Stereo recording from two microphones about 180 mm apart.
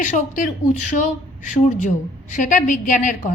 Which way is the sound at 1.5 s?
40° left (ahead or behind).